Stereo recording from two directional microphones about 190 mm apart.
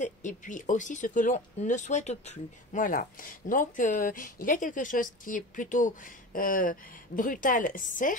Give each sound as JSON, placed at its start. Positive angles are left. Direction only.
{"t": 0.0, "sound": "speech", "side_deg": 40}